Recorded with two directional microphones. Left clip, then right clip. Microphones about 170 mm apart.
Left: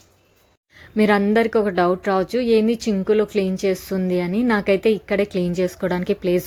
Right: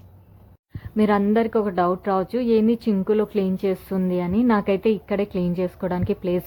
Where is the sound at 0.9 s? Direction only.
25° left (ahead or behind).